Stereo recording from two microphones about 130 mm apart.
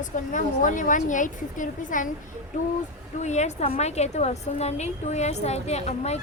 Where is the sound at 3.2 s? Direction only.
60° left (ahead or behind).